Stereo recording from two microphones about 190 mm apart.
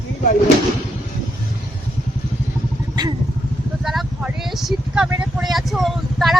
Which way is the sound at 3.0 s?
20° right (ahead or behind).